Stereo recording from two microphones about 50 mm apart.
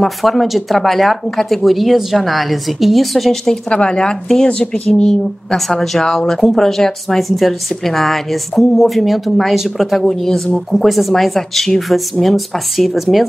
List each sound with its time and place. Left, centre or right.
0.0 s speech: centre
3.7 s speech: centre
10.0 s speech: centre